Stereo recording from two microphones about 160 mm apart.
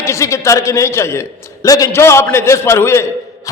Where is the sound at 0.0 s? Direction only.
20° left (ahead or behind).